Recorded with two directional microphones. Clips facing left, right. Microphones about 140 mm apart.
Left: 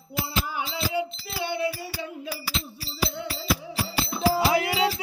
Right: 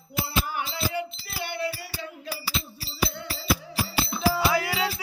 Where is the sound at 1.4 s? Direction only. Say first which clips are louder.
Left 3 dB; 20° left (ahead or behind).